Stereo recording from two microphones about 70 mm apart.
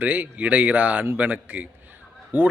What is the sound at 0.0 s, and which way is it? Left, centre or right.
A man's voice, right.